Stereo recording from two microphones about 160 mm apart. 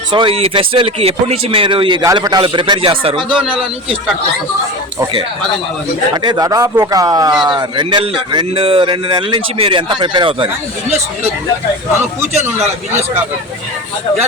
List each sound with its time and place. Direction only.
0.1 s speech: 30° right (ahead or behind)
6.2 s a man's voice: 25° right (ahead or behind)